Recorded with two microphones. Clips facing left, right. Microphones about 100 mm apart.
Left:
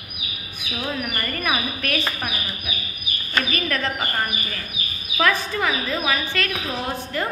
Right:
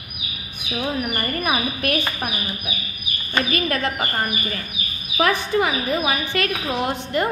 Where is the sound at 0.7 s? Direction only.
20° right (ahead or behind).